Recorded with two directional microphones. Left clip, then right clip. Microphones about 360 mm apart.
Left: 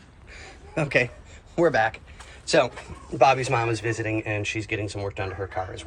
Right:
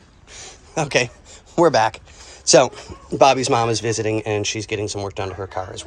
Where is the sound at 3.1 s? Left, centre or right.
Right.